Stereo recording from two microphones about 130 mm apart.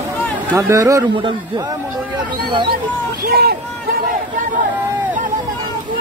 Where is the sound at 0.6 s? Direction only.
25° right (ahead or behind).